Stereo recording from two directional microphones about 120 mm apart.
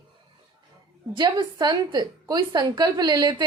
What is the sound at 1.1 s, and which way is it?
A woman's voice, 35° right (ahead or behind).